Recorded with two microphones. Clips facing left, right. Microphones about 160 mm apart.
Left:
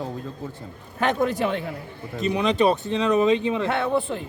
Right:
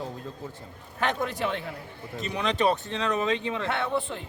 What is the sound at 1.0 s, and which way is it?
Speech, 45° left (ahead or behind).